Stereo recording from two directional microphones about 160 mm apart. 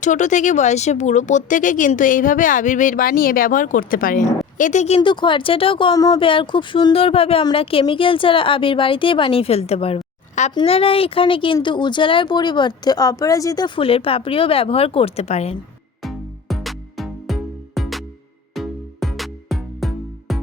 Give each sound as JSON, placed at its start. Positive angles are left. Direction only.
{"t": 0.0, "sound": "speech", "side_deg": 50}
{"t": 4.5, "sound": "speech", "side_deg": 50}
{"t": 16.0, "sound": "music", "side_deg": 0}